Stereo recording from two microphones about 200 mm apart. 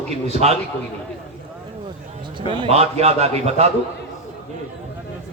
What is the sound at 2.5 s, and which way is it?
A man's voice, 30° right (ahead or behind).